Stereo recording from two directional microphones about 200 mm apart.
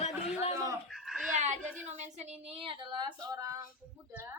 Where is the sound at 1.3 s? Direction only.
35° right (ahead or behind).